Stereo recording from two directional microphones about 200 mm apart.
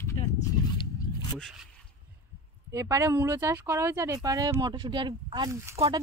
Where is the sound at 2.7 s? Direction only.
15° right (ahead or behind).